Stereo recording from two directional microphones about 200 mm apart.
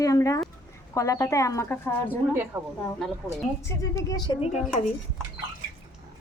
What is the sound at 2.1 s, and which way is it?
Speech, 10° right (ahead or behind).